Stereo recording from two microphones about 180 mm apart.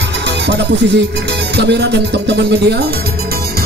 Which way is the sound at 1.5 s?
70° right (ahead or behind).